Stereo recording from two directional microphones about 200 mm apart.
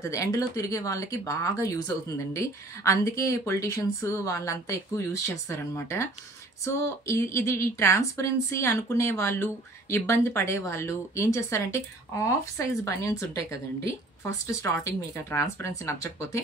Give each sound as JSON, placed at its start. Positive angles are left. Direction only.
{"t": 0.0, "sound": "a woman's voice", "side_deg": 15}